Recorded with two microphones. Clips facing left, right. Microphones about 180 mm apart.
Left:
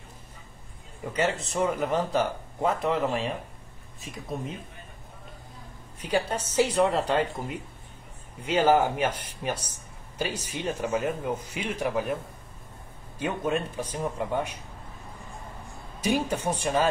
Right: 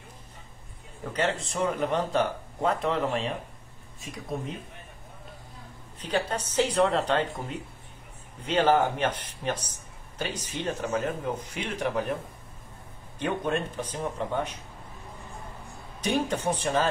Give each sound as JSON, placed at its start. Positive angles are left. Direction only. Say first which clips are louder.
{"t": 1.0, "sound": "speech", "louder": "left 1 dB", "side_deg": 10}
{"t": 5.9, "sound": "speech", "louder": "left 1 dB", "side_deg": 10}
{"t": 13.2, "sound": "speech", "louder": "even", "side_deg": 5}
{"t": 16.0, "sound": "speech", "louder": "left 1 dB", "side_deg": 10}